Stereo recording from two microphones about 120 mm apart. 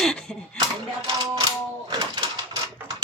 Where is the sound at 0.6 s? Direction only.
35° right (ahead or behind).